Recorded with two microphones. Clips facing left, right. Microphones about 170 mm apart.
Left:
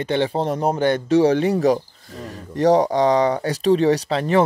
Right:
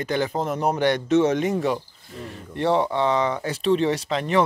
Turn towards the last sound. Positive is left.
turn(degrees=35)  # may be behind; listen again after turning